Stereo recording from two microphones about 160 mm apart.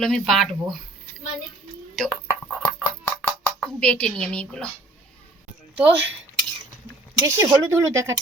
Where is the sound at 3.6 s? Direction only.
5° left (ahead or behind).